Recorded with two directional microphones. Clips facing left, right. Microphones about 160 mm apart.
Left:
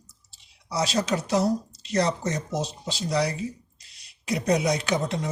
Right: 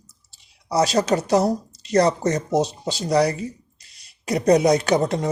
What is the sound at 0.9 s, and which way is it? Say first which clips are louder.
Speech: right 4 dB; 70° right (ahead or behind).